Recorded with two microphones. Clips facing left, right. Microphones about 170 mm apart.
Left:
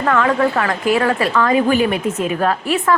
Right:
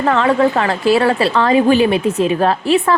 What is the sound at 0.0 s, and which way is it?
A woman's voice, 25° right (ahead or behind).